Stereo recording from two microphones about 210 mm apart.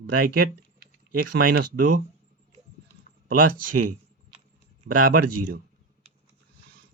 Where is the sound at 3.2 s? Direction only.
40° right (ahead or behind).